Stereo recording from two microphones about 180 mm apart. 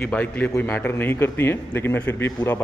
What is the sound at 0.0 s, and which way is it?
A man's voice, 10° left (ahead or behind).